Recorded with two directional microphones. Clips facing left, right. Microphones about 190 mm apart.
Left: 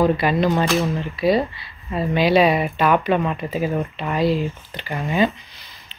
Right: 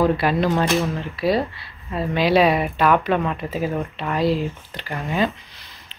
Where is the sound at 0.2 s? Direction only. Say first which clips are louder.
Left 1 dB; centre (ahead or behind).